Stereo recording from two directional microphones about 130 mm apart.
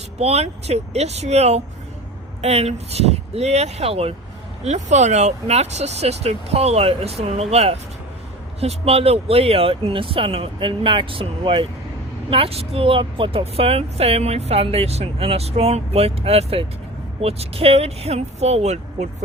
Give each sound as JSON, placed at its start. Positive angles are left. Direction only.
{"t": 0.2, "sound": "speech", "side_deg": -55}
{"t": 4.6, "sound": "a woman's voice", "side_deg": -60}